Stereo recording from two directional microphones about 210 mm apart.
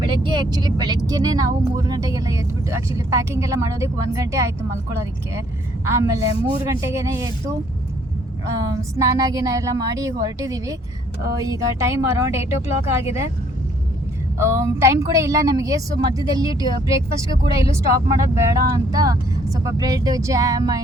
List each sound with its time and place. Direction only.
0.0 s speech: 20° right (ahead or behind)
8.6 s speech: 15° right (ahead or behind)
14.3 s speech: 10° right (ahead or behind)